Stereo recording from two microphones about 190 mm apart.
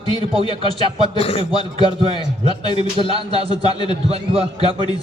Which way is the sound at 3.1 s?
30° right (ahead or behind).